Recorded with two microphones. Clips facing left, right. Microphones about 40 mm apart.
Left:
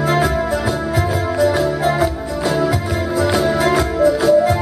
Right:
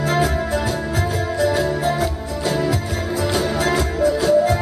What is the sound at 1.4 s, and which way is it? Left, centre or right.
Music, centre.